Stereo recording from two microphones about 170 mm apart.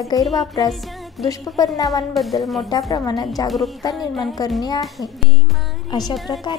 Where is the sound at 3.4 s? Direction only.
Centre (ahead or behind).